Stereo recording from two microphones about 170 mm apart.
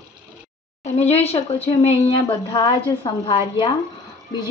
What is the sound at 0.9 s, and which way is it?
A woman's voice, 40° left (ahead or behind).